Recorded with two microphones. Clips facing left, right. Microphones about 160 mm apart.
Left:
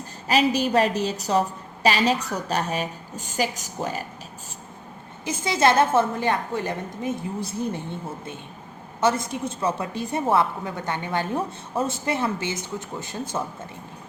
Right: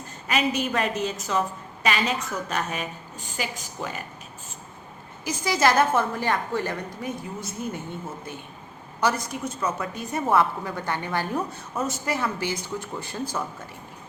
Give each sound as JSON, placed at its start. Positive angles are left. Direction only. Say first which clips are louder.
{"t": 0.3, "sound": "a woman's voice", "louder": "left 4 dB", "side_deg": 35}
{"t": 5.2, "sound": "a woman's voice", "louder": "left 1 dB", "side_deg": 25}
{"t": 7.3, "sound": "a woman's voice", "louder": "left 4 dB", "side_deg": 30}
{"t": 9.0, "sound": "a woman's voice", "louder": "left 3 dB", "side_deg": 25}